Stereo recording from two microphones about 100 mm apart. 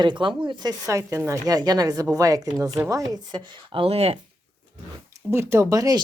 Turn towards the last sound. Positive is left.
turn(degrees=-35)  # may be behind; listen again after turning